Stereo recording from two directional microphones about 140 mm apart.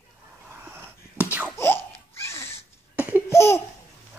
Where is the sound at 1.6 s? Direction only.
20° left (ahead or behind).